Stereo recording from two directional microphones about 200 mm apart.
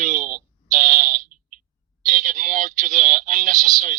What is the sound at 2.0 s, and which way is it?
Speech, 40° right (ahead or behind).